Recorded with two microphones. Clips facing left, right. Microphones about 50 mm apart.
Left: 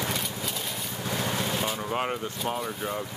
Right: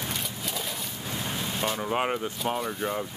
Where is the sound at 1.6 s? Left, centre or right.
Centre.